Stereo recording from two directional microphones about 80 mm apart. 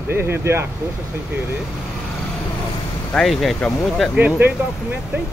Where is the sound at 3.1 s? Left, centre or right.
Centre.